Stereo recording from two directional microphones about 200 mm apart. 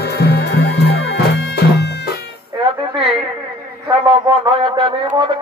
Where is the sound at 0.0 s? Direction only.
55° left (ahead or behind).